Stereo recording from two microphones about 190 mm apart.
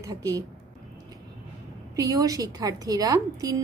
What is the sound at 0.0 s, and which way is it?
Speech, 15° right (ahead or behind).